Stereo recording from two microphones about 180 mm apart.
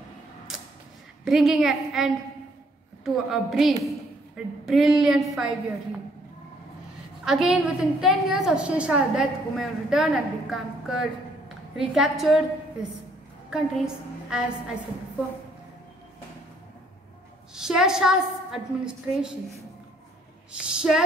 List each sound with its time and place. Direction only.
1.2 s a woman's voice: centre (ahead or behind)
3.3 s a woman's voice: centre (ahead or behind)
7.2 s a woman's voice: centre (ahead or behind)
13.5 s a woman's voice: 5° right (ahead or behind)
17.6 s a woman's voice: 5° right (ahead or behind)
20.5 s a woman's voice: 5° right (ahead or behind)